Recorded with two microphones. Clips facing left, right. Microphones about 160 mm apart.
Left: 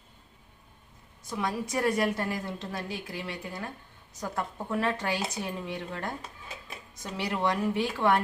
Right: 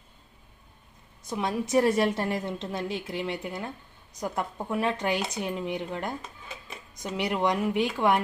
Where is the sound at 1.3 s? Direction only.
25° right (ahead or behind).